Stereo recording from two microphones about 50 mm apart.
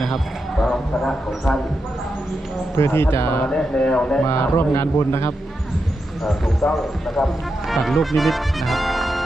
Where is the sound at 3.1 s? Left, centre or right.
Left.